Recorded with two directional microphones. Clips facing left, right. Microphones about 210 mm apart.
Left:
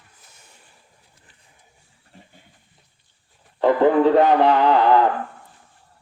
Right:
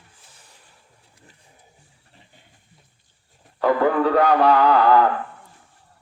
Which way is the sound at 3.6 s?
25° left (ahead or behind).